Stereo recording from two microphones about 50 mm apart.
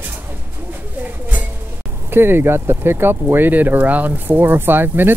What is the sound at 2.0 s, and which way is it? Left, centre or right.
Speech, right.